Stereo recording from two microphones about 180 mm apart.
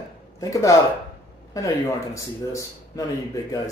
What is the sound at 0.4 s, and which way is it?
Speech, 15° left (ahead or behind).